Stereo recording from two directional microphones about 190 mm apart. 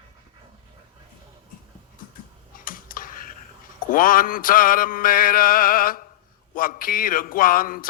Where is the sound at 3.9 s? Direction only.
45° left (ahead or behind).